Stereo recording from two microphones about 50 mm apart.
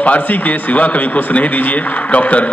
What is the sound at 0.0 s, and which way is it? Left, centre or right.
A man's voice, left.